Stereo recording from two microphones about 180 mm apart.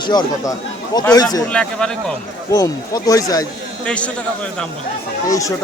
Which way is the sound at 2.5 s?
20° left (ahead or behind).